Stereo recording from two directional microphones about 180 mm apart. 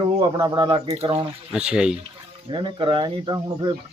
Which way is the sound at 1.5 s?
5° right (ahead or behind).